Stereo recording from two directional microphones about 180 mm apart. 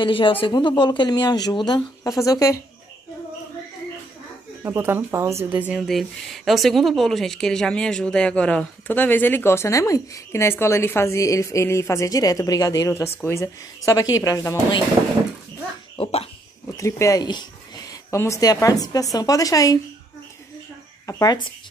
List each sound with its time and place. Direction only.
0.0 s speech: 30° left (ahead or behind)
4.6 s speech: 15° right (ahead or behind); by 14.8 s 15° left (ahead or behind)
16.0 s cough: 35° left (ahead or behind)
16.7 s speech: 15° left (ahead or behind)
21.1 s speech: 20° left (ahead or behind)